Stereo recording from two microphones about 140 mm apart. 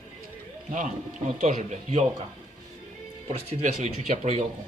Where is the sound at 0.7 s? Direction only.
60° right (ahead or behind).